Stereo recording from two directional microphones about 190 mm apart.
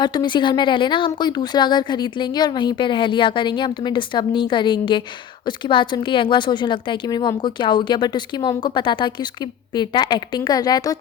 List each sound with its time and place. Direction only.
0.0 s a woman's voice: 20° left (ahead or behind)